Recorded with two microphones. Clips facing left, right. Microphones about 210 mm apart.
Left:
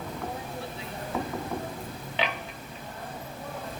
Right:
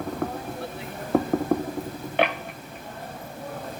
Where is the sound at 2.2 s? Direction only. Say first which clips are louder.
Right 8 dB; 55° right (ahead or behind).